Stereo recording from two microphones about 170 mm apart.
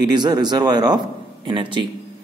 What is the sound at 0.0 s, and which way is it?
A man's voice, 25° right (ahead or behind).